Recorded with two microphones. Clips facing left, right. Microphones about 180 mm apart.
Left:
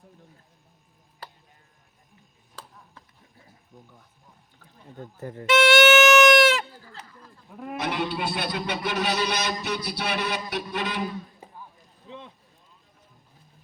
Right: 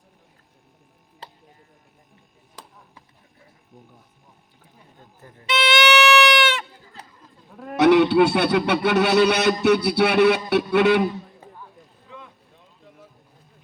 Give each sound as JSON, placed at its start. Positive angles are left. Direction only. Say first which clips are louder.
{"t": 1.2, "sound": "tick-tock", "louder": "right 1 dB", "side_deg": -25}
{"t": 4.9, "sound": "speech", "louder": "left 13 dB", "side_deg": 75}
{"t": 5.5, "sound": "goat", "louder": "left 3 dB", "side_deg": 45}
{"t": 7.8, "sound": "music", "louder": "right 15 dB", "side_deg": -70}
{"t": 12.0, "sound": "a sound", "louder": "left 2 dB", "side_deg": 30}
{"t": 12.5, "sound": "a sound", "louder": "right 10 dB", "side_deg": -75}